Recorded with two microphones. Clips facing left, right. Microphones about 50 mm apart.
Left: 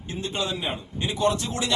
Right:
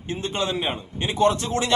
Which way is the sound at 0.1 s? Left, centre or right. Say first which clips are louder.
Right 3 dB; right.